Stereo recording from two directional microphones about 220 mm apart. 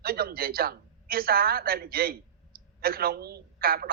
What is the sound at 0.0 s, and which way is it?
A woman's voice, 45° right (ahead or behind).